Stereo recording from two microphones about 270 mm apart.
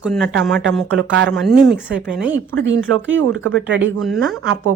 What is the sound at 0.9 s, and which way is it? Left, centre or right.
Speech, right.